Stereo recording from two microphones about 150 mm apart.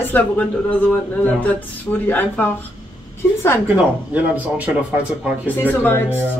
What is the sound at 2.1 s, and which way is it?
Speech, 10° left (ahead or behind).